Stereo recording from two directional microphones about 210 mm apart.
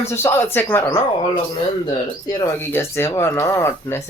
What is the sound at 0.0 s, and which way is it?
Speech, 10° left (ahead or behind).